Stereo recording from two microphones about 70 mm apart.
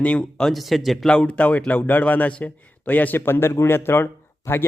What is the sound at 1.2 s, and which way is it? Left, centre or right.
A man's voice, centre.